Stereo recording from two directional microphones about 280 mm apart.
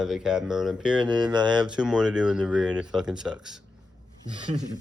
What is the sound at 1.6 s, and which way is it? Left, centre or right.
Speech, centre.